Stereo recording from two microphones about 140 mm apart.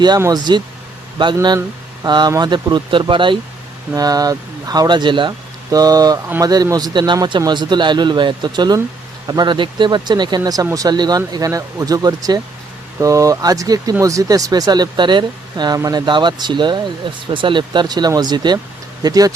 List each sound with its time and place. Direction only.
0.2 s speech: 25° right (ahead or behind)